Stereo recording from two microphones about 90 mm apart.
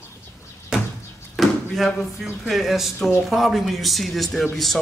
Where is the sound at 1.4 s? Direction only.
Centre (ahead or behind).